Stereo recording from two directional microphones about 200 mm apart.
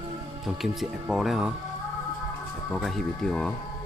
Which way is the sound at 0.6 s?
Centre (ahead or behind).